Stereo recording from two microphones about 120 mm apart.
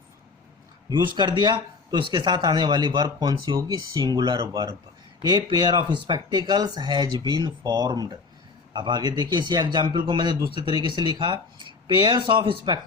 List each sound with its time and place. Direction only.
0.9 s speech: 40° right (ahead or behind)